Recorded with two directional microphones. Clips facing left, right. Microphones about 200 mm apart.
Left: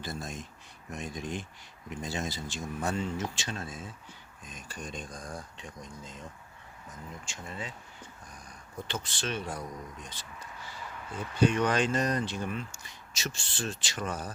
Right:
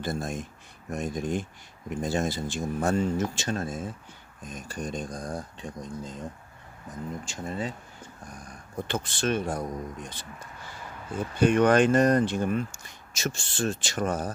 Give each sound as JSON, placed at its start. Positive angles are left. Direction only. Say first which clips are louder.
{"t": 0.0, "sound": "speech", "louder": "right 7 dB", "side_deg": -55}
{"t": 7.3, "sound": "speech", "louder": "right 7 dB", "side_deg": -40}
{"t": 8.9, "sound": "speech", "louder": "right 8 dB", "side_deg": -50}
{"t": 11.3, "sound": "speech", "louder": "right 6 dB", "side_deg": -55}